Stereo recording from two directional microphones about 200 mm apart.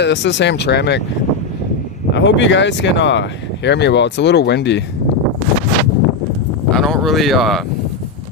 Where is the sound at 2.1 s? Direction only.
65° left (ahead or behind).